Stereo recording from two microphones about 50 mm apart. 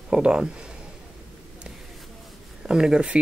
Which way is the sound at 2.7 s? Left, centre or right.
Centre.